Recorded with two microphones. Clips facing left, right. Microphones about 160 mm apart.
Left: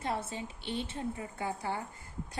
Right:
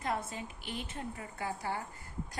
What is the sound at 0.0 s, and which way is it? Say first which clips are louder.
A woman's voice: left 1 dB; 30° left (ahead or behind).